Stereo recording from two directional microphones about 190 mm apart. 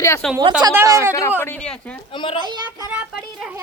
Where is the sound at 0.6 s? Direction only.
15° right (ahead or behind).